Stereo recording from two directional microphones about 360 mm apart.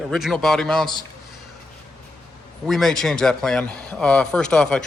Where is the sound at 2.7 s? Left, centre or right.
Centre.